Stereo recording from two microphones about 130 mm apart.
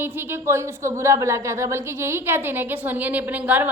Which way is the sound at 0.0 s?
15° right (ahead or behind).